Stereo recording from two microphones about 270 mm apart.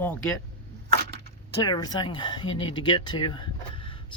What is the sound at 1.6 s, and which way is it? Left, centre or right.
Speech, centre.